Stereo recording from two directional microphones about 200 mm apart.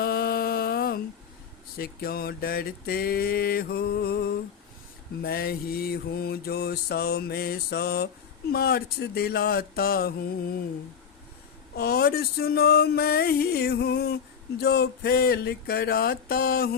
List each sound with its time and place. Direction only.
0.0 s a sound: 50° left (ahead or behind)
1.8 s mantra: 50° left (ahead or behind)
11.8 s mantra: 50° left (ahead or behind)